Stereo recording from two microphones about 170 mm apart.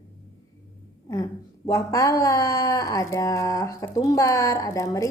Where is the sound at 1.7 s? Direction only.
20° left (ahead or behind).